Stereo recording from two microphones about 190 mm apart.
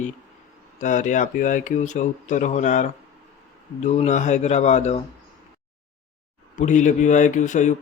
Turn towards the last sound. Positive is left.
turn(degrees=40)  # may be behind; listen again after turning